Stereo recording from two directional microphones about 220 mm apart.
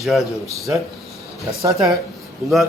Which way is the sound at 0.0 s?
Centre (ahead or behind).